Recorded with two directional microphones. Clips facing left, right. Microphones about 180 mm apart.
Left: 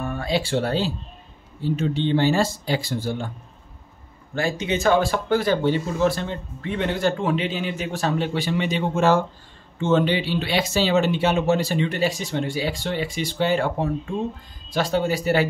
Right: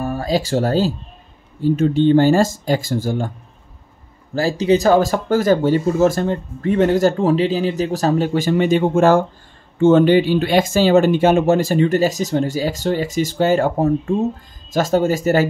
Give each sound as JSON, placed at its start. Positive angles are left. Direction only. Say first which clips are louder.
{"t": 0.0, "sound": "speech", "louder": "right 5 dB", "side_deg": -35}
{"t": 4.4, "sound": "speech", "louder": "right 8 dB", "side_deg": -35}